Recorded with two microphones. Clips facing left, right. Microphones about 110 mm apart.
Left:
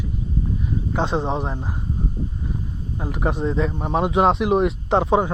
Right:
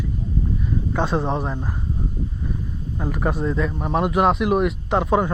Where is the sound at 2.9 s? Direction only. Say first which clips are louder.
Even; 20° left (ahead or behind).